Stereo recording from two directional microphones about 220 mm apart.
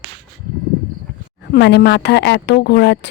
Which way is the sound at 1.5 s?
50° left (ahead or behind).